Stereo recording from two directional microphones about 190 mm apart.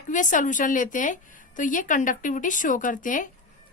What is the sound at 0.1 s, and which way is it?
A woman's voice, 40° left (ahead or behind).